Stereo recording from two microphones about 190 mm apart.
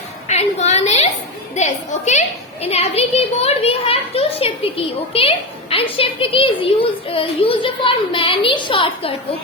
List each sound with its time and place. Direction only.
0.3 s a sound: 35° left (ahead or behind)
1.5 s a woman's voice: 40° left (ahead or behind)
5.7 s a child's voice: 30° left (ahead or behind)